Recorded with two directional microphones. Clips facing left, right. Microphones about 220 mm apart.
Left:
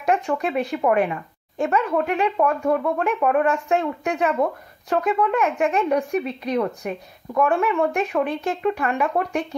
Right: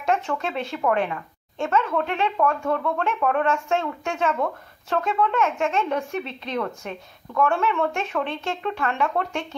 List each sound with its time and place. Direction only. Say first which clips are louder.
0.0 s speech: left 3 dB; 15° left (ahead or behind)